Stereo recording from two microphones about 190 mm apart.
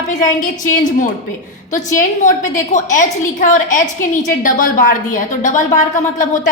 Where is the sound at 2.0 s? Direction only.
40° left (ahead or behind).